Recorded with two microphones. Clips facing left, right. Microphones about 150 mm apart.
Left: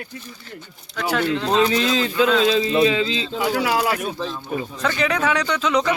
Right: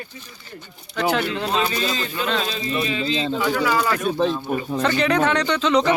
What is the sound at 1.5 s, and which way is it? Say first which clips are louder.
Speech: left 7 dB; 80° left.